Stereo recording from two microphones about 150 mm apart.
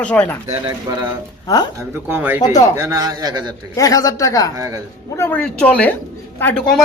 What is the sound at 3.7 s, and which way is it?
Speech, 25° left (ahead or behind).